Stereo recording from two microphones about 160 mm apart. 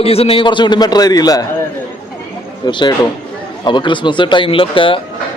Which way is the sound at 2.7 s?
30° left (ahead or behind).